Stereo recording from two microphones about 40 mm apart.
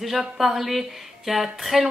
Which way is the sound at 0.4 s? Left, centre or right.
Centre.